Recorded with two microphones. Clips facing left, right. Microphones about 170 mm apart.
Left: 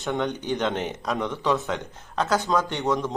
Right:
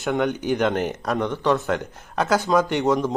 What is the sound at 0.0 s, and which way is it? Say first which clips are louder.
Speech: right 4 dB; 5° right (ahead or behind).